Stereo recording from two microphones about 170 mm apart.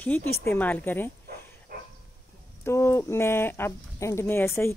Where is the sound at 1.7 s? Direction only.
55° right (ahead or behind).